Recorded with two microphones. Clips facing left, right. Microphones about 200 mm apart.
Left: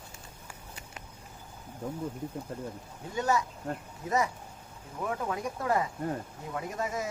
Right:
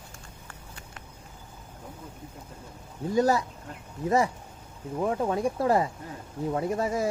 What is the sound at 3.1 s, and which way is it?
Speech, 35° right (ahead or behind).